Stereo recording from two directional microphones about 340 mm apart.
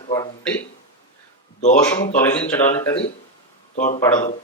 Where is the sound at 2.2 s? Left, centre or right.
Centre.